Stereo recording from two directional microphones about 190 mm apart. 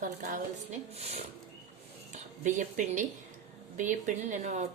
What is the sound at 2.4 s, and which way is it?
A woman's voice, 40° right (ahead or behind).